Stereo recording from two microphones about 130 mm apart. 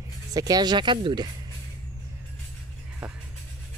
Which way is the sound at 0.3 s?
30° right (ahead or behind).